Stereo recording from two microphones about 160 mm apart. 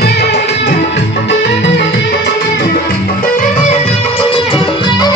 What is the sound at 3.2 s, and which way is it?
Music, 60° left (ahead or behind).